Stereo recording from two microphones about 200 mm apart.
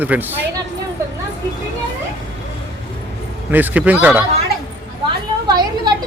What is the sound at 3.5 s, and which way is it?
Speech, 10° right (ahead or behind).